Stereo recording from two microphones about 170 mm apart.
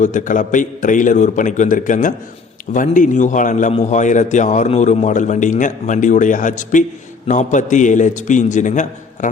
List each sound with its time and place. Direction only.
0.0 s a man's voice: 50° left (ahead or behind)